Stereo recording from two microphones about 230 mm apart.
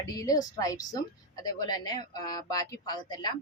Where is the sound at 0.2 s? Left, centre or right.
Centre.